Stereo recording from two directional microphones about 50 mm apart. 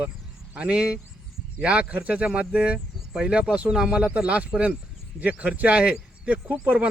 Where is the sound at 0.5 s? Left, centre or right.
Right.